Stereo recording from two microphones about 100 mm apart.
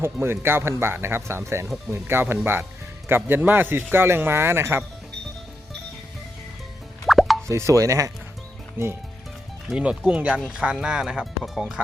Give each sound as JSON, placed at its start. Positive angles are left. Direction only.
{"t": 0.0, "sound": "speech", "side_deg": -25}
{"t": 7.1, "sound": "plop", "side_deg": 0}
{"t": 7.4, "sound": "speech", "side_deg": -30}
{"t": 9.6, "sound": "speech", "side_deg": -10}